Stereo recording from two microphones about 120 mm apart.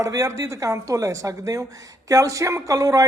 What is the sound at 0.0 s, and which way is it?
A man's voice, 30° right (ahead or behind).